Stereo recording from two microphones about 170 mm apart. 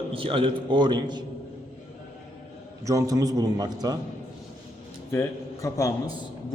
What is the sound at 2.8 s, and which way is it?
Speech, 20° right (ahead or behind).